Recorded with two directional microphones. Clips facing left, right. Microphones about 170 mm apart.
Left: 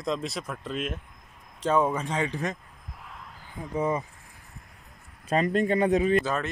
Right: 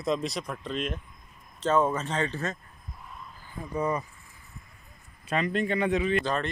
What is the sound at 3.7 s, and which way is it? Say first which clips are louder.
Speech: left 2 dB; 20° left (ahead or behind).